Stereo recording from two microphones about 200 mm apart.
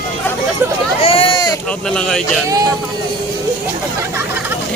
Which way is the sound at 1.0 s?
25° left (ahead or behind).